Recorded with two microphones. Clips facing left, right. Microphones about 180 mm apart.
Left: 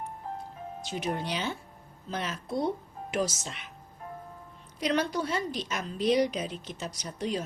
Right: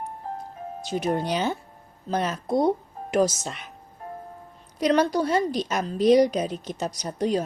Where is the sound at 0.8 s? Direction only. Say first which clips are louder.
Right 7 dB; 40° right (ahead or behind).